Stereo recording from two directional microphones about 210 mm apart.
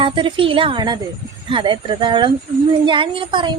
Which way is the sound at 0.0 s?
25° right (ahead or behind).